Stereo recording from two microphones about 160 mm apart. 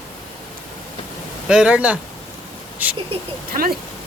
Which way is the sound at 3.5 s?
60° right (ahead or behind).